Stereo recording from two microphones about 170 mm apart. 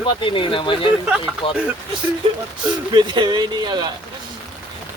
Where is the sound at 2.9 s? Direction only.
25° right (ahead or behind).